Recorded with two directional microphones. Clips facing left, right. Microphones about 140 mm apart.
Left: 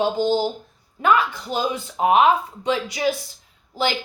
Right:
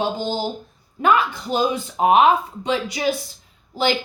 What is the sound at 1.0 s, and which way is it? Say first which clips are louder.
A woman's voice: right 1 dB; 20° right (ahead or behind).